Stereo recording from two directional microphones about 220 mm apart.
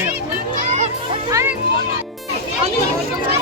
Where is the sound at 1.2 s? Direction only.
15° right (ahead or behind).